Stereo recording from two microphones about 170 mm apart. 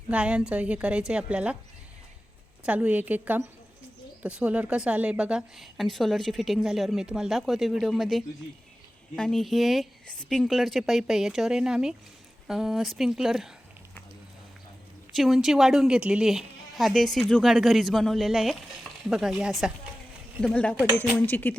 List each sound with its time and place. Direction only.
0.1 s a woman's voice: 5° right (ahead or behind)
2.6 s a woman's voice: 10° right (ahead or behind)
15.1 s speech: centre (ahead or behind)
20.7 s a woman's voice: 10° right (ahead or behind)
21.2 s speech: 10° left (ahead or behind)